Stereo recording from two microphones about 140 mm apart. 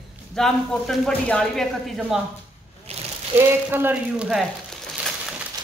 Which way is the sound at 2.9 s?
45° right (ahead or behind).